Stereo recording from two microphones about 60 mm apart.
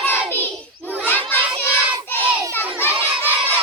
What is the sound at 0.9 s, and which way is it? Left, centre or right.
Crowd, left.